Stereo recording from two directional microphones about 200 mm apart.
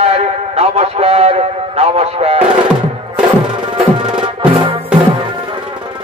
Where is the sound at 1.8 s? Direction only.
30° right (ahead or behind).